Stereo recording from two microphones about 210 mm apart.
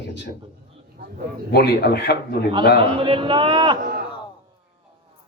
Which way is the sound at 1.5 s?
50° left (ahead or behind).